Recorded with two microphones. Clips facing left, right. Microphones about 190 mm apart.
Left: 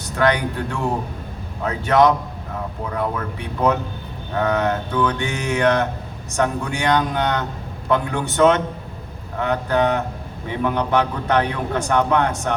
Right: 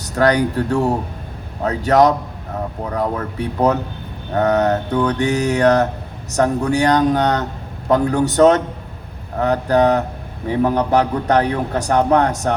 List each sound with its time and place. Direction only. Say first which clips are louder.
0.0 s a man's voice: right 4 dB; 40° right (ahead or behind)